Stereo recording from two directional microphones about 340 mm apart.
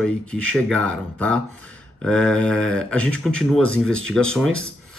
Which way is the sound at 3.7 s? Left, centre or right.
Right.